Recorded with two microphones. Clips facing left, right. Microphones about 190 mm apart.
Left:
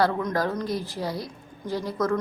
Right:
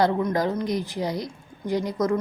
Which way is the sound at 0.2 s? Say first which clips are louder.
Right 2 dB; 15° right (ahead or behind).